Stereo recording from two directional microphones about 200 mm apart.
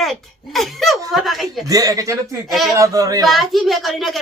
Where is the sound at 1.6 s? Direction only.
15° right (ahead or behind).